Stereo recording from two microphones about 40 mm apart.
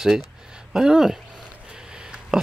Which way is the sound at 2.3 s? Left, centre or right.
Centre.